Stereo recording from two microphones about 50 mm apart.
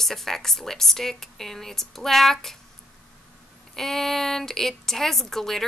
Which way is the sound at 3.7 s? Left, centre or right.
Centre.